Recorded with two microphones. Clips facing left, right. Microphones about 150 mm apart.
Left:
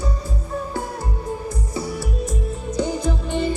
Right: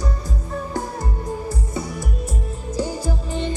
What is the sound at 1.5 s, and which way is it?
Music, 25° right (ahead or behind).